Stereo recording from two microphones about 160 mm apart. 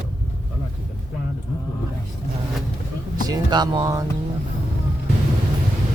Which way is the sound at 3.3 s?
25° right (ahead or behind).